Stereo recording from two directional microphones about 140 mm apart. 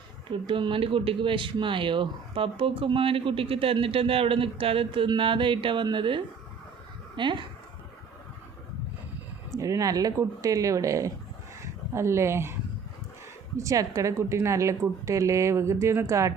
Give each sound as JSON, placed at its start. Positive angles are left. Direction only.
{"t": 0.3, "sound": "speech", "side_deg": -35}
{"t": 9.6, "sound": "a woman's voice", "side_deg": -25}
{"t": 13.6, "sound": "a woman's voice", "side_deg": -25}